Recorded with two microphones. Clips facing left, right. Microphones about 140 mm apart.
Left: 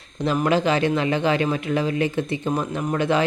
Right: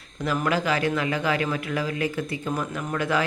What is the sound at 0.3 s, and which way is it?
Speech, 25° left (ahead or behind).